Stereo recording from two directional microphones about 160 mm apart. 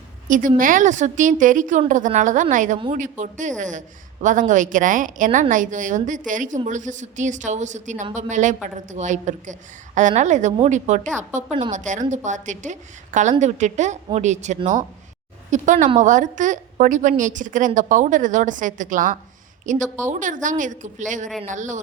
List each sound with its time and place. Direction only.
0.3 s a woman's voice: 55° right (ahead or behind)